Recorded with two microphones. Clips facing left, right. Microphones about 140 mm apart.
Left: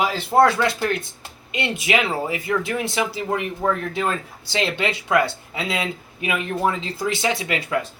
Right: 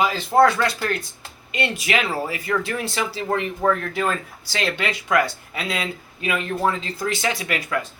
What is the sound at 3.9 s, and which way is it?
A man's voice, 25° left (ahead or behind).